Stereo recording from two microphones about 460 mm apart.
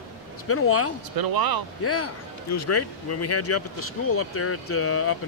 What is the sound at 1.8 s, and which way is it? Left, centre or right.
Speech, left.